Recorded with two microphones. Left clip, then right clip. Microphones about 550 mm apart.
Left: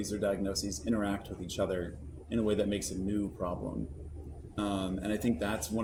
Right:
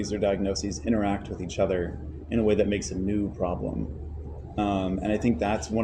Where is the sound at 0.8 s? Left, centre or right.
Left.